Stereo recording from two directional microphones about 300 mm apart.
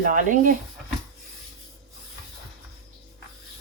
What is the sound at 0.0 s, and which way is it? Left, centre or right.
Speech, right.